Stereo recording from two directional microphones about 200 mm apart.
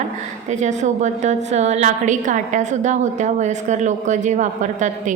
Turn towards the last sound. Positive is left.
turn(degrees=-40)  # may be behind; listen again after turning